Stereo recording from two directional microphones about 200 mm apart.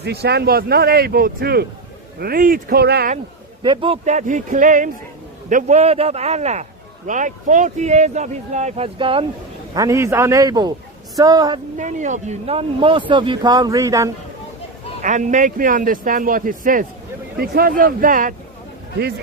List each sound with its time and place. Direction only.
0.0 s speech: 55° right (ahead or behind)
3.6 s speech: 25° right (ahead or behind)
9.7 s a man's voice: 15° right (ahead or behind)
11.8 s speech: 40° right (ahead or behind); by 14.1 s 15° right (ahead or behind)
15.0 s speech: 40° right (ahead or behind)